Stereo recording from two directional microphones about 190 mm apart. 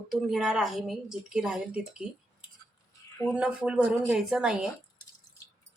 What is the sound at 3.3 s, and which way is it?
A woman's voice, 5° right (ahead or behind).